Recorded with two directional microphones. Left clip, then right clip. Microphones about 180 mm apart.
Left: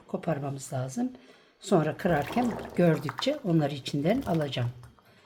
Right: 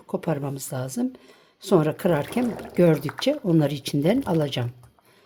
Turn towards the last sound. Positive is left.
turn(degrees=-45)  # may be behind; listen again after turning